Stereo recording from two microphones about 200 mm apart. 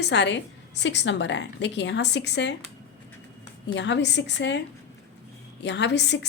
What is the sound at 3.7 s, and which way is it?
A woman's voice, 60° left (ahead or behind).